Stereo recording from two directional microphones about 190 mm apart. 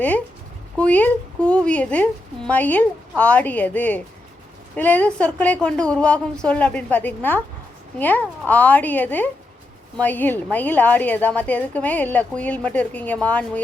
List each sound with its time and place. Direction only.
0.8 s a woman's voice: 5° left (ahead or behind)